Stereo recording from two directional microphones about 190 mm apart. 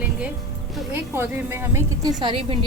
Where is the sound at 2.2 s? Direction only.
25° right (ahead or behind).